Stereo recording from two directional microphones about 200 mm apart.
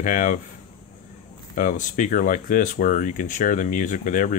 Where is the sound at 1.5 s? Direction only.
45° left (ahead or behind).